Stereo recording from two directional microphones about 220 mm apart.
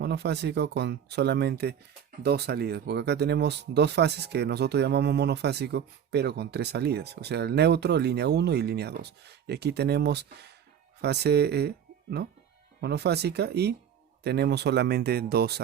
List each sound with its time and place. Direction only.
0.0 s speech: 50° right (ahead or behind)
12.8 s speech: 50° right (ahead or behind)